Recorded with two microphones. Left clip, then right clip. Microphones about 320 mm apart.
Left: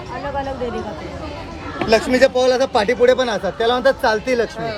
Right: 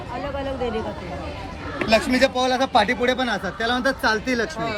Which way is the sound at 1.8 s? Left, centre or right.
Centre.